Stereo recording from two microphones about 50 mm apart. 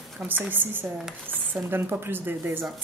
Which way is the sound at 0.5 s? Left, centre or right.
Right.